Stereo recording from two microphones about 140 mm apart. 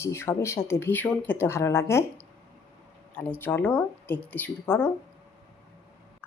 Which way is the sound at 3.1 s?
15° left (ahead or behind).